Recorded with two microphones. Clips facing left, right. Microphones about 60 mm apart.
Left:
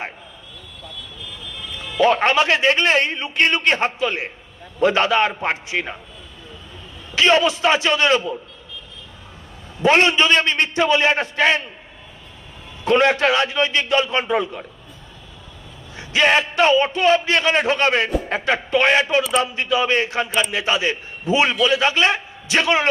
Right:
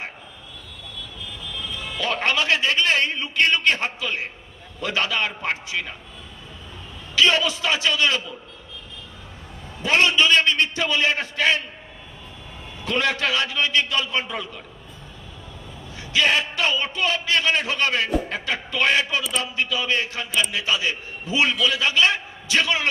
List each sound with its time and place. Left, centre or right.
2.0 s a man's voice: left
7.2 s a man's voice: left
9.8 s a man's voice: left
12.8 s a man's voice: left
16.0 s a man's voice: left